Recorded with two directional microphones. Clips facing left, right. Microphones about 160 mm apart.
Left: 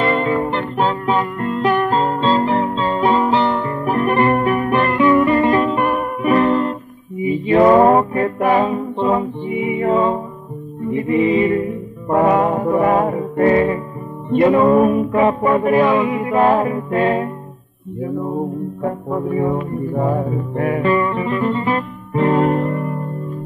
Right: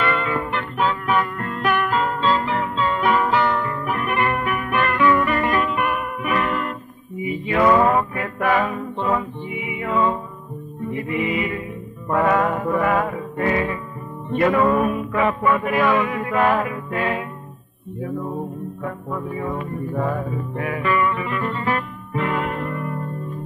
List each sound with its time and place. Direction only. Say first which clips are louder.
0.0 s music: left 6 dB; 35° left (ahead or behind)
9.2 s music: left 8 dB; 40° left (ahead or behind)
12.1 s music: left 4 dB; 25° left (ahead or behind)
14.3 s music: left 6 dB; 25° left (ahead or behind)
18.0 s music: left 5 dB; 25° left (ahead or behind)
20.2 s music: left 6 dB; 40° left (ahead or behind); by 21.8 s 20° left (ahead or behind)
22.1 s music: left 9 dB; 40° left (ahead or behind)